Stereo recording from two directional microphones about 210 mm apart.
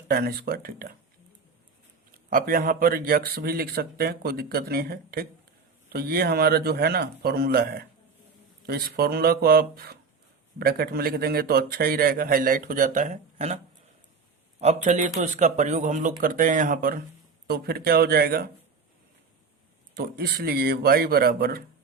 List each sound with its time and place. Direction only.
0.1 s speech: 45° right (ahead or behind)
2.1 s speech: 45° right (ahead or behind)
14.6 s speech: 35° right (ahead or behind)
20.0 s speech: 45° right (ahead or behind)